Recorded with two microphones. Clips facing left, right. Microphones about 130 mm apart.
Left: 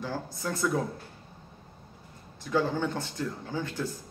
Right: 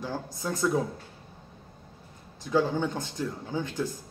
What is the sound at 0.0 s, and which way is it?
Speech, 15° right (ahead or behind).